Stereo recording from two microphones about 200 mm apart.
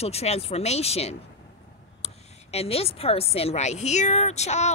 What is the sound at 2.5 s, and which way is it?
Speech, 30° left (ahead or behind).